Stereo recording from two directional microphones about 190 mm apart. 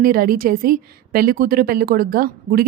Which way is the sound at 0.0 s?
50° right (ahead or behind).